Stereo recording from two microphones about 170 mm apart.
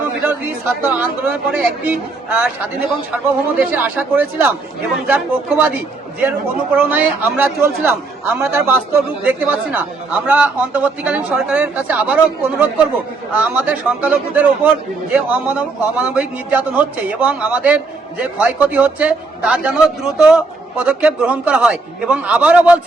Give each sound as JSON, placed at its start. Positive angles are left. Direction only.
{"t": 0.2, "sound": "a man's voice", "side_deg": -10}
{"t": 3.6, "sound": "a man's voice", "side_deg": -10}